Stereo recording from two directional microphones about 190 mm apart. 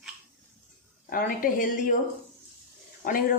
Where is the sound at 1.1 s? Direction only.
45° left (ahead or behind).